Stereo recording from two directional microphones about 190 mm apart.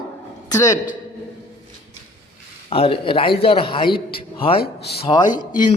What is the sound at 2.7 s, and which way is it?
A man's voice, 30° left (ahead or behind).